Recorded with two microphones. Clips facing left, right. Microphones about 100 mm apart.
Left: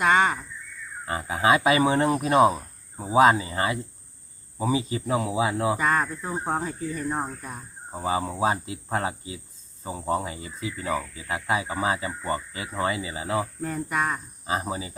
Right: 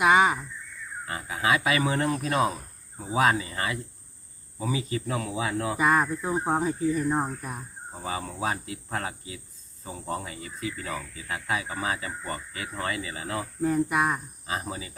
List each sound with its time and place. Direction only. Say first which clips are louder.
0.0 s a sound: right 1 dB; 10° right (ahead or behind)
1.0 s speech: left 5 dB; 30° left (ahead or behind)
5.7 s speech: right 1 dB; 10° right (ahead or behind)
7.9 s speech: left 7 dB; 25° left (ahead or behind)
13.6 s speech: right 3 dB; 10° right (ahead or behind)
14.4 s speech: left 7 dB; 25° left (ahead or behind)